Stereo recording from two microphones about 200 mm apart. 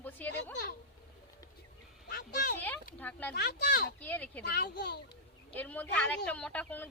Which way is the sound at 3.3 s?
55° left (ahead or behind).